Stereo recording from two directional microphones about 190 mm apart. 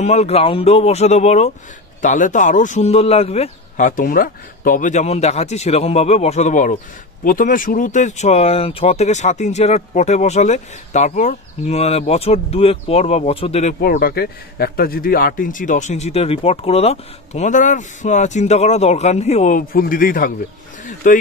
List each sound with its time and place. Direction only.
0.0 s a man's voice: 35° left (ahead or behind)
13.7 s a man's voice: 50° left (ahead or behind)